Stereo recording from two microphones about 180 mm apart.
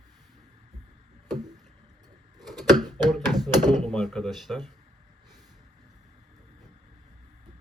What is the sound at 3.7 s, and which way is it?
Speech, centre (ahead or behind).